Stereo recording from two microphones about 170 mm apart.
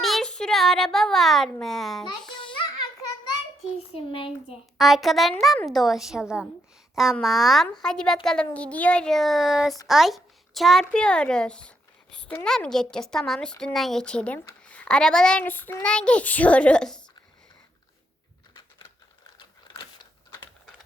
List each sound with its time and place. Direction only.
0.0 s a child's voice: centre (ahead or behind)
2.0 s babbling: 25° left (ahead or behind)
3.9 s speech: 30° left (ahead or behind)
4.5 s a woman's voice: centre (ahead or behind)
19.4 s a sound: 25° left (ahead or behind)